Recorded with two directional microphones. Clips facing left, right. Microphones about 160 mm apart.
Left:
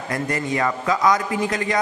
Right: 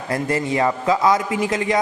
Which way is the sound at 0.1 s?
25° right (ahead or behind).